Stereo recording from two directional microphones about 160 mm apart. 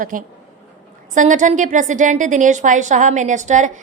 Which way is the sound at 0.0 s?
60° right (ahead or behind).